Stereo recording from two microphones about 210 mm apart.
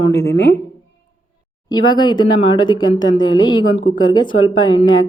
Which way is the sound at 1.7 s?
20° left (ahead or behind).